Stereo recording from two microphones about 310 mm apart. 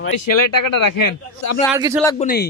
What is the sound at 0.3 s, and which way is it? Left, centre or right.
Speech, left.